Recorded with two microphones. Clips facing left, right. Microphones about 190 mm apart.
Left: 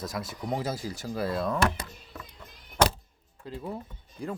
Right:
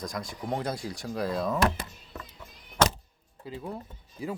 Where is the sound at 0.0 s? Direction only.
5° left (ahead or behind).